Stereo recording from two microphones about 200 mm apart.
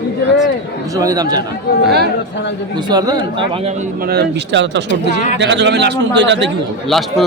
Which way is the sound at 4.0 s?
50° right (ahead or behind).